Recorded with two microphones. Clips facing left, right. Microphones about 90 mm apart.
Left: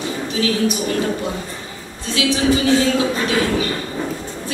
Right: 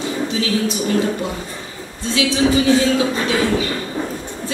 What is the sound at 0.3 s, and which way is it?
Speech, 25° right (ahead or behind).